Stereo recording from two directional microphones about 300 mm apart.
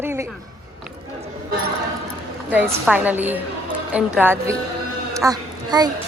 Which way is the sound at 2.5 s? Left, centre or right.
Centre.